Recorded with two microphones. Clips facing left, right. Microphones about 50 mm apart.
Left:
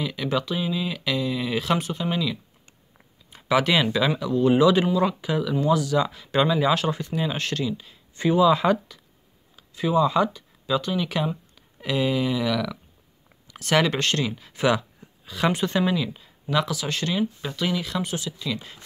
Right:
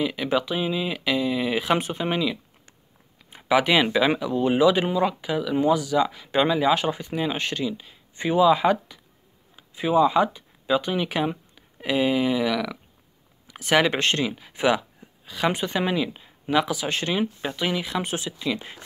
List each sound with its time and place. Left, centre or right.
0.0 s speech: centre
3.3 s a sound: centre
3.8 s speech: centre
15.8 s speech: right